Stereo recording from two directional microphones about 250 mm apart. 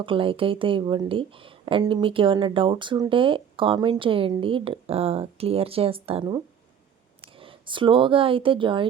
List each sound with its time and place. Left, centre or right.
0.0 s speech: right